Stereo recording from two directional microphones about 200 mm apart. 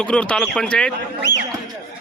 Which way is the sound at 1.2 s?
60° left (ahead or behind).